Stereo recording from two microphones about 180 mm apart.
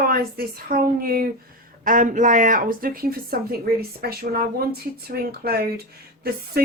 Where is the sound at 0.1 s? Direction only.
55° right (ahead or behind).